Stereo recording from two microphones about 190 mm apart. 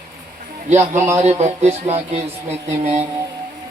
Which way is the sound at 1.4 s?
35° right (ahead or behind).